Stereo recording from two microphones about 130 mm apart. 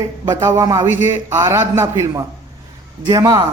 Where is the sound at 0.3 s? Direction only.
25° right (ahead or behind).